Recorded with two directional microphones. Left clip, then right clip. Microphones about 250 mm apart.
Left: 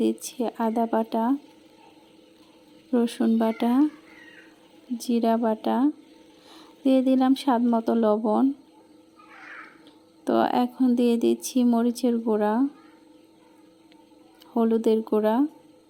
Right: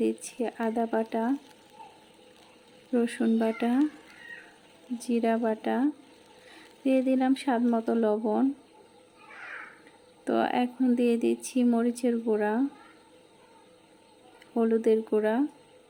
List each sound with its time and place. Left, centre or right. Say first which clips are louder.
0.0 s speech: left 3 dB; centre
2.9 s speech: left 3 dB; centre
4.9 s speech: left 3 dB; centre
10.2 s speech: left 4 dB; centre
14.5 s speech: left 2 dB; centre